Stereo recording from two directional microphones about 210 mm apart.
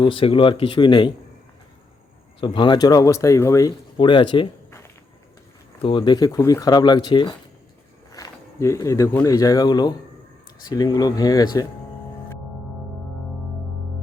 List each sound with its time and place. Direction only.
0.0 s speech: 25° left (ahead or behind)
2.4 s speech: 20° left (ahead or behind)
5.8 s speech: 25° left (ahead or behind)